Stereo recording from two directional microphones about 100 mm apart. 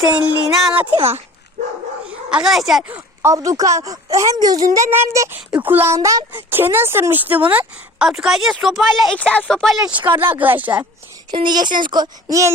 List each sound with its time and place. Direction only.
0.1 s speech: 5° right (ahead or behind)
0.9 s speech: 75° right (ahead or behind)
2.0 s speech: 10° right (ahead or behind)
2.9 s speech: 25° right (ahead or behind)
5.5 s a woman's voice: 15° right (ahead or behind)
8.0 s speech: 5° right (ahead or behind)
10.0 s speech: 20° right (ahead or behind)
11.3 s speech: 50° right (ahead or behind)